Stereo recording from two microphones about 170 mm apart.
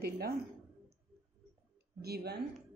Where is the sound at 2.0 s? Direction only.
70° right (ahead or behind).